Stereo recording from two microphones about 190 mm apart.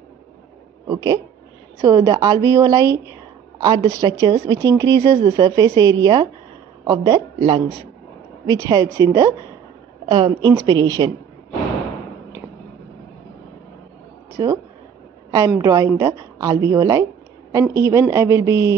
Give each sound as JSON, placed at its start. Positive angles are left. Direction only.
{"t": 0.8, "sound": "a woman's voice", "side_deg": -20}
{"t": 15.3, "sound": "a woman's voice", "side_deg": -15}